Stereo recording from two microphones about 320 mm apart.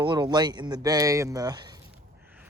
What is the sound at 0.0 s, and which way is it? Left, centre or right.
Speech, centre.